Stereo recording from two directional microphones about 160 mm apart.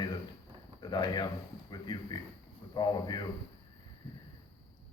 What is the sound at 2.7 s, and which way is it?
Speech, 25° left (ahead or behind).